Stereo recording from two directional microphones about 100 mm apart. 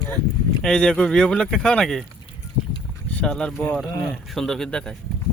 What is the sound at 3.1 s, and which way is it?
Speech, 5° left (ahead or behind).